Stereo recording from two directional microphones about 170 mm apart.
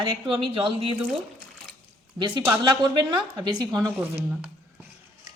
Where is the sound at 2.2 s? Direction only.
30° right (ahead or behind).